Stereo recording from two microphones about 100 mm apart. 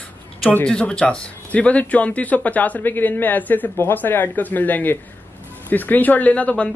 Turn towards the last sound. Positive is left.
turn(degrees=10)  # may be behind; listen again after turning